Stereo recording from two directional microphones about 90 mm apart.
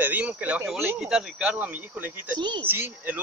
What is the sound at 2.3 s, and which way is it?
Speech, 55° right (ahead or behind).